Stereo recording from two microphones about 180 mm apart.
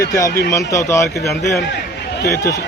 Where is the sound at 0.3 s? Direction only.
60° left (ahead or behind).